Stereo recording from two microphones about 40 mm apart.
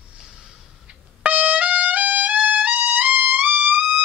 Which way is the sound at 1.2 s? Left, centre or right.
Right.